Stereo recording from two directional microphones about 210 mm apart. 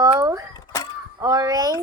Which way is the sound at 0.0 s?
15° right (ahead or behind).